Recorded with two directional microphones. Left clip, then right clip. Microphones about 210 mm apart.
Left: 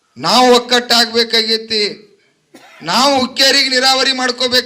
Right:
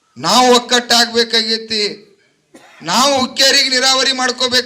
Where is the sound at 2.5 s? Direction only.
45° left (ahead or behind).